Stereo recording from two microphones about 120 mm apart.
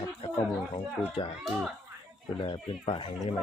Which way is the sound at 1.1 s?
45° left (ahead or behind).